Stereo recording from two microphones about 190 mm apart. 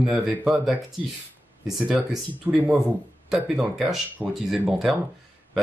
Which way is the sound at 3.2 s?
5° right (ahead or behind).